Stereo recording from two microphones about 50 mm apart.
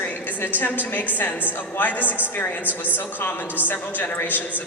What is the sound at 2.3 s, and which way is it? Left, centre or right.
A woman's voice, left.